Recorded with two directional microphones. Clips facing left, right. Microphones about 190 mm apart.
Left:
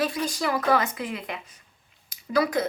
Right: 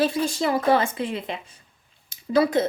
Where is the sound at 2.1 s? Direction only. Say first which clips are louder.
Right 4 dB; 25° right (ahead or behind).